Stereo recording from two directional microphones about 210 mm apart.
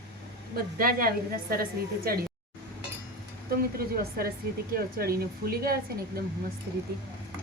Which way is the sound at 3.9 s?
45° right (ahead or behind).